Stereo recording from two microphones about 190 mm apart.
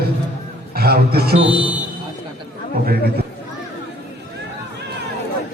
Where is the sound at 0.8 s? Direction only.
55° right (ahead or behind).